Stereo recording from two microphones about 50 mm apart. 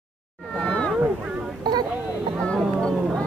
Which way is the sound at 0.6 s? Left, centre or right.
Left.